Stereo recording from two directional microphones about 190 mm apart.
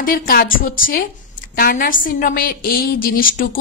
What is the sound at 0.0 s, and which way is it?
A woman's voice, 50° left (ahead or behind).